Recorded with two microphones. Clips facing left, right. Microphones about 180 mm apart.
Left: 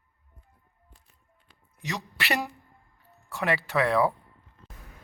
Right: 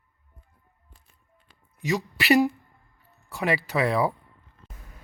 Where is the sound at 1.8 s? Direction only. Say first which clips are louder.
Right 7 dB; centre (ahead or behind).